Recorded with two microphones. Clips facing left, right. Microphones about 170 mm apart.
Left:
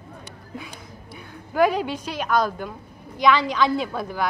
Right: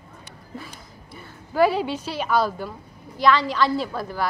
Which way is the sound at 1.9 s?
10° left (ahead or behind).